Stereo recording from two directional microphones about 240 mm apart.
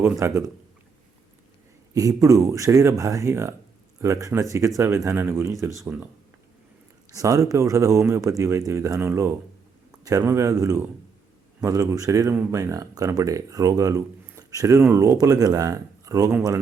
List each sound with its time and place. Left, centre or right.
0.0 s speech: centre
1.9 s speech: centre
7.1 s speech: centre